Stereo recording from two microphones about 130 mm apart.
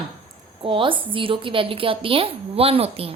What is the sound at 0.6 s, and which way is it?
A woman's voice, 40° right (ahead or behind).